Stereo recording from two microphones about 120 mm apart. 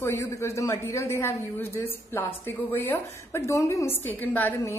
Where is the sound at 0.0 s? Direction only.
20° left (ahead or behind).